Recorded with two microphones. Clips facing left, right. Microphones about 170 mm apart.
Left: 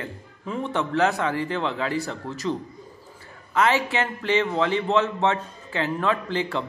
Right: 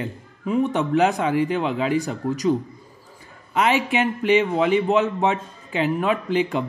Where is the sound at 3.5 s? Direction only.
20° right (ahead or behind).